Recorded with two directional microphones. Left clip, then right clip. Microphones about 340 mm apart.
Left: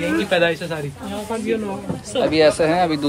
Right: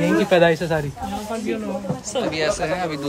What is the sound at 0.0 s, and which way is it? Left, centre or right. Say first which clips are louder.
Speech: right 2 dB; right.